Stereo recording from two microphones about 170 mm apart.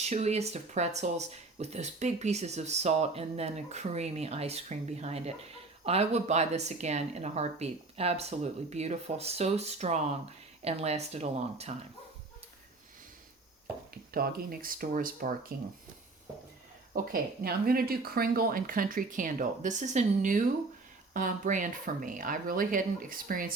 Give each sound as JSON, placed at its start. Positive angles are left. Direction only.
{"t": 0.0, "sound": "speech", "side_deg": -40}
{"t": 14.1, "sound": "speech", "side_deg": -60}
{"t": 16.9, "sound": "speech", "side_deg": -60}